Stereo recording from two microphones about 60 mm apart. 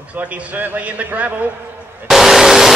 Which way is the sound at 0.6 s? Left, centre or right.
Right.